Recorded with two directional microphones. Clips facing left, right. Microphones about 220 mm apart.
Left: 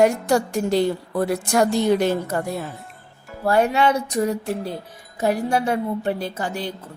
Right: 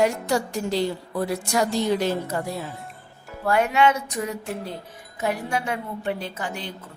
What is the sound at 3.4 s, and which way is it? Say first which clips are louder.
A woman's voice: left 2 dB; 35° left (ahead or behind).